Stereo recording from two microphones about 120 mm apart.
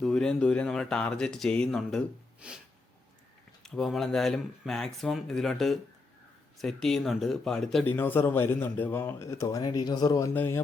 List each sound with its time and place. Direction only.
0.0 s speech: 5° left (ahead or behind)
2.4 s snort: 10° right (ahead or behind)
3.6 s speech: 5° left (ahead or behind)
7.9 s a man's voice: 15° left (ahead or behind)